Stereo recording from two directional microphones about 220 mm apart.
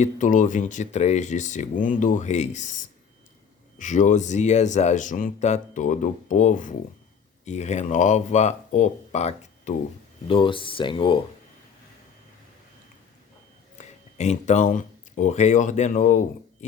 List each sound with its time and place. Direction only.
0.0 s speech: 35° left (ahead or behind)
3.8 s speech: 35° left (ahead or behind)
13.7 s speech: 30° left (ahead or behind)